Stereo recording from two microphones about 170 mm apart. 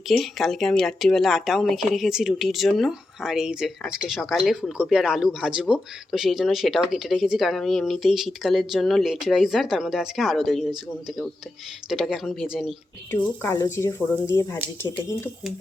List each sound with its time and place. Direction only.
0.1 s a woman's voice: centre (ahead or behind)
11.9 s a woman's voice: centre (ahead or behind)
13.1 s speech: 15° left (ahead or behind)